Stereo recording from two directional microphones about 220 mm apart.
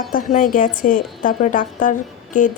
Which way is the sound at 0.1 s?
40° left (ahead or behind).